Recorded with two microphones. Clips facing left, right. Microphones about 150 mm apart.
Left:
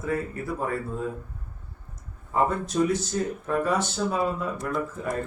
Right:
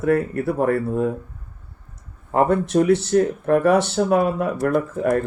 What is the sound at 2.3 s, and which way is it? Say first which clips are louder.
Speech: right 7 dB; 65° right (ahead or behind).